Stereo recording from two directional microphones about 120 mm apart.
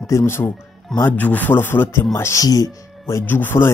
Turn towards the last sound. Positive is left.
turn(degrees=20)  # may be behind; listen again after turning